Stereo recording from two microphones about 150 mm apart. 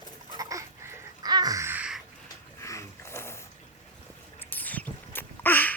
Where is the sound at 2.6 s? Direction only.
20° left (ahead or behind).